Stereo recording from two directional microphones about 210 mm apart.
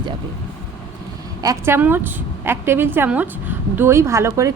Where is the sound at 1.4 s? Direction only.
15° right (ahead or behind).